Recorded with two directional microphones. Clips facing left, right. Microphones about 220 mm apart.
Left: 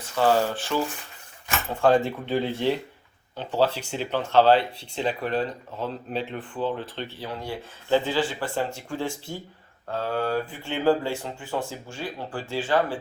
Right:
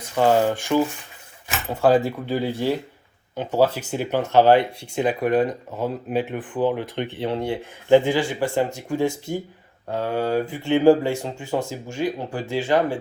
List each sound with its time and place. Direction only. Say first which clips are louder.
0.2 s speech: right 4 dB; 15° right (ahead or behind)